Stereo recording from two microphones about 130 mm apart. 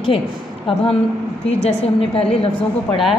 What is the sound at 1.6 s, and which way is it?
Speech, 45° left (ahead or behind).